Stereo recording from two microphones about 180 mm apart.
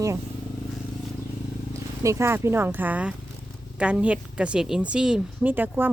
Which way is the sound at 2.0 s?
15° right (ahead or behind).